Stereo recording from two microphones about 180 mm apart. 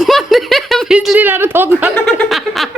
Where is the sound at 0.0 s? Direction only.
Centre (ahead or behind).